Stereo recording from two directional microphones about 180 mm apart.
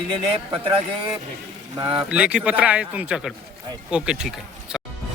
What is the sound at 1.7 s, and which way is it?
Speech, 30° right (ahead or behind).